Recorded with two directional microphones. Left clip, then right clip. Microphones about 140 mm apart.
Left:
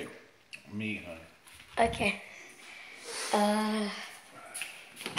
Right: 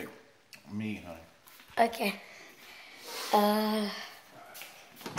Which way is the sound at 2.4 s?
25° right (ahead or behind).